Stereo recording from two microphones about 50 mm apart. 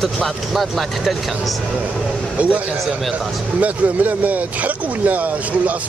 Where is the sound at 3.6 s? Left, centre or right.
Right.